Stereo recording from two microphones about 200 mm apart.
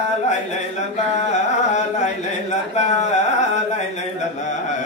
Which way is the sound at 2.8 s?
35° left (ahead or behind).